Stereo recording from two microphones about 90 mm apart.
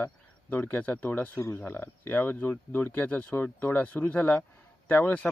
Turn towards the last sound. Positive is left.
turn(degrees=15)  # may be behind; listen again after turning